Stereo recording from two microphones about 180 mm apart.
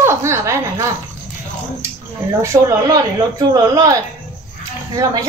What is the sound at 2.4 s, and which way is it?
A woman's voice, 15° right (ahead or behind).